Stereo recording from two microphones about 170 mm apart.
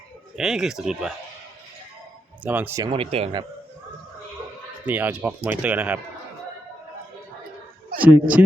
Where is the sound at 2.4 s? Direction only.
10° right (ahead or behind).